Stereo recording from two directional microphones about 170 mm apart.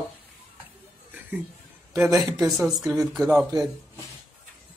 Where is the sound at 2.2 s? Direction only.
20° right (ahead or behind).